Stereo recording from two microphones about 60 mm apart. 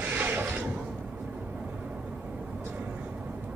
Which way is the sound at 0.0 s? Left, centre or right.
Right.